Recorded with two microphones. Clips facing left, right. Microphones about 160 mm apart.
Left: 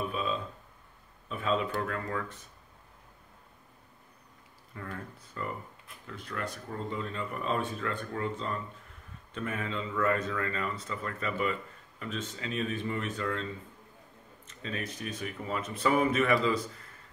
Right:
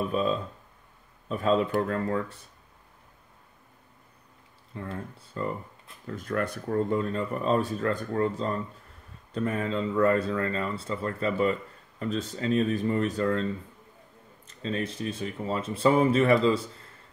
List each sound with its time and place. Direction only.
0.1 s speech: 40° right (ahead or behind)
4.7 s speech: 25° right (ahead or behind)
6.0 s speech: 45° right (ahead or behind)
14.5 s speech: 30° right (ahead or behind)